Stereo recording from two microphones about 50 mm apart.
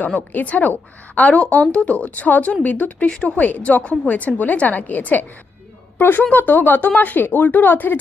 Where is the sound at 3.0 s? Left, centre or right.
Centre.